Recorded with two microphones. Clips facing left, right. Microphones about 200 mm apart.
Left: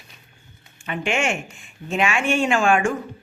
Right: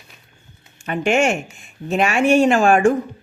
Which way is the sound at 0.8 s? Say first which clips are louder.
Right 6 dB; 40° right (ahead or behind).